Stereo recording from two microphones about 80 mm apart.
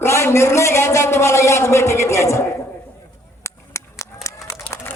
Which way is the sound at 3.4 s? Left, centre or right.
Left.